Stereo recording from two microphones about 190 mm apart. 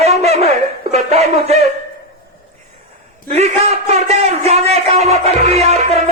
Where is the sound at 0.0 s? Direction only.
35° right (ahead or behind).